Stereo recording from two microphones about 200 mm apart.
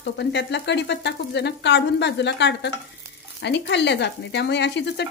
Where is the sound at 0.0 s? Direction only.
55° left (ahead or behind).